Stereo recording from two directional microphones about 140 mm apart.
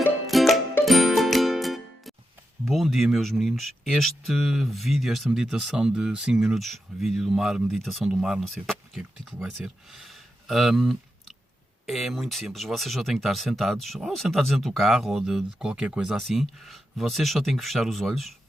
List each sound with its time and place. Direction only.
0.3 s music: centre (ahead or behind)
2.6 s speech: centre (ahead or behind)